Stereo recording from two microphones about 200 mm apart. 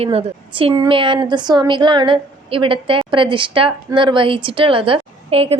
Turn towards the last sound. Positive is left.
turn(degrees=-30)  # may be behind; listen again after turning